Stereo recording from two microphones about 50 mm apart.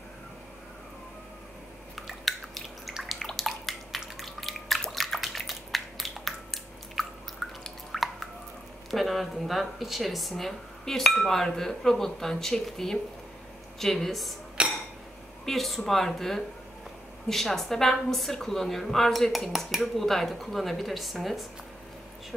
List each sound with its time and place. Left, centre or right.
2.0 s drip: centre
3.0 s bathtub: centre
4.2 s drip: centre
8.9 s speech: centre
14.6 s a sound: right
15.4 s a woman's voice: centre